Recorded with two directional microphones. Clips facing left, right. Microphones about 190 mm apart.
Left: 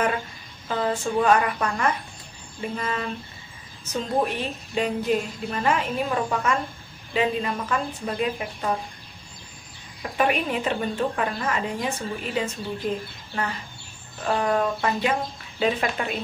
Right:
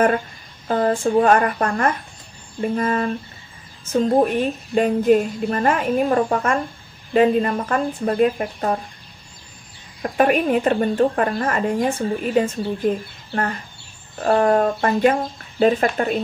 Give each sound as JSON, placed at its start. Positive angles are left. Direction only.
{"t": 0.7, "sound": "a woman's voice", "side_deg": -50}
{"t": 10.0, "sound": "a woman's voice", "side_deg": -50}